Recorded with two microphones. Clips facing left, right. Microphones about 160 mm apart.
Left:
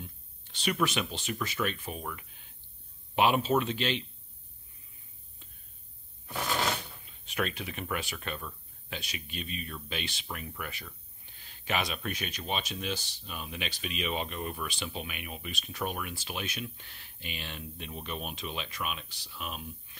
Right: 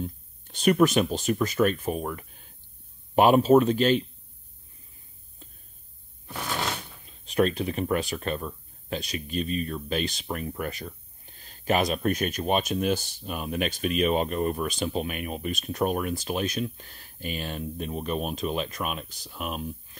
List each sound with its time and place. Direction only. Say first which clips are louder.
0.0 s speech: right 13 dB; 45° right (ahead or behind)
7.1 s speech: right 10 dB; 35° right (ahead or behind)